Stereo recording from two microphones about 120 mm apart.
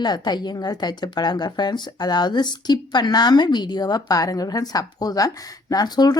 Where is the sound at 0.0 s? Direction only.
35° left (ahead or behind).